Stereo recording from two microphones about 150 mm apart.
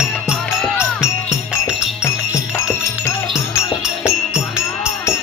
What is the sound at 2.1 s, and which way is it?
Music, 20° left (ahead or behind).